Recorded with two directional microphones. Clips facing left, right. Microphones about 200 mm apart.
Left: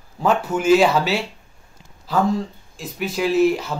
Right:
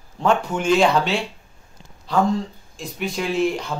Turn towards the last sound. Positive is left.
turn(degrees=5)  # may be behind; listen again after turning